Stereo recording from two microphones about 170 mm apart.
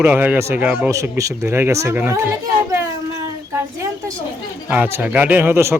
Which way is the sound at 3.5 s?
20° right (ahead or behind).